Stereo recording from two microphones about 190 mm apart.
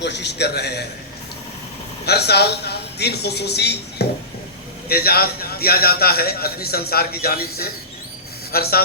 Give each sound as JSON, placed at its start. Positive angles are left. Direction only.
{"t": 0.0, "sound": "a man's voice", "side_deg": 65}
{"t": 2.0, "sound": "a man's voice", "side_deg": 60}